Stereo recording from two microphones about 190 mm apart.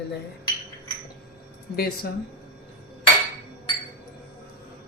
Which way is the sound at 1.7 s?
55° left (ahead or behind).